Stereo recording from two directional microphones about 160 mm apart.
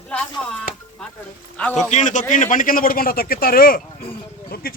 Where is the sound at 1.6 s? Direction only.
10° left (ahead or behind).